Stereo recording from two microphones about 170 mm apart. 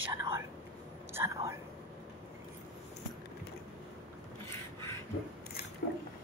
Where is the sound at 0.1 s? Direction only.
20° right (ahead or behind).